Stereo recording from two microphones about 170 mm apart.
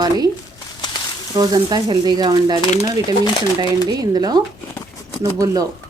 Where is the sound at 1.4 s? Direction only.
25° right (ahead or behind).